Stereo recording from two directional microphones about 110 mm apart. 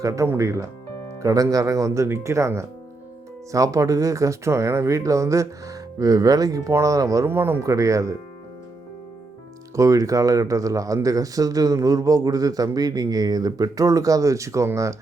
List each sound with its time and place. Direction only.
0.0 s speech: 30° right (ahead or behind)
7.3 s speech: 20° right (ahead or behind)
9.7 s speech: 30° right (ahead or behind)